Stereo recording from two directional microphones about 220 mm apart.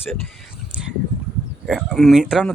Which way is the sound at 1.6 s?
Centre (ahead or behind).